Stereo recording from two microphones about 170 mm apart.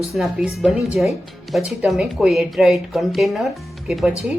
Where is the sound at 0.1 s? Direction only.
Centre (ahead or behind).